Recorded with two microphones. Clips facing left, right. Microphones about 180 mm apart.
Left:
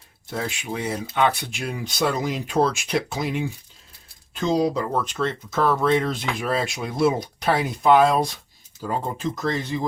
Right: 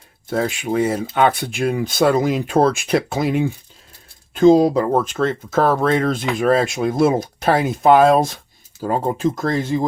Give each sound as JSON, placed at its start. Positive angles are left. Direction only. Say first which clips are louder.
{"t": 0.3, "sound": "speech", "louder": "right 8 dB", "side_deg": -50}